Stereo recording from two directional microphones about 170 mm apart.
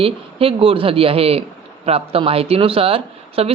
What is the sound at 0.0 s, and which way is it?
Speech, 35° right (ahead or behind).